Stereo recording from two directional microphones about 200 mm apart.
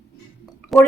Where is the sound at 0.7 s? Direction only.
Centre (ahead or behind).